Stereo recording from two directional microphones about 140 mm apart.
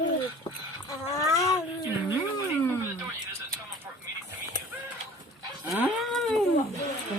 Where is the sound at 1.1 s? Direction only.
25° left (ahead or behind).